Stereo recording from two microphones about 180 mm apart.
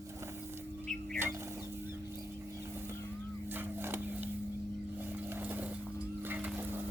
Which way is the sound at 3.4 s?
10° right (ahead or behind).